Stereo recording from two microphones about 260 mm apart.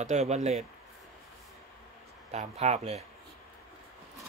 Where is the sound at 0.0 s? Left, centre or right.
Right.